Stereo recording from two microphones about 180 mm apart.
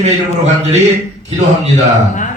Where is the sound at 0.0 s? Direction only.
40° right (ahead or behind).